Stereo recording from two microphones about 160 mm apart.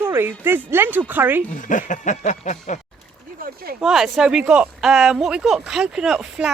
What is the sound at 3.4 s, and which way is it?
Speech, 70° right (ahead or behind).